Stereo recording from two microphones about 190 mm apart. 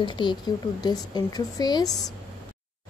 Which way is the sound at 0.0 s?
25° left (ahead or behind).